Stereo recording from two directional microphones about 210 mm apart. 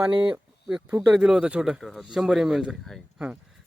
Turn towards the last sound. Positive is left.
turn(degrees=0)  # may be behind; listen again after turning